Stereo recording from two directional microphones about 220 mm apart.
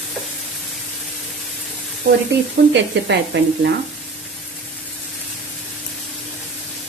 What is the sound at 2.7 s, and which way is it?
Speech, 55° right (ahead or behind).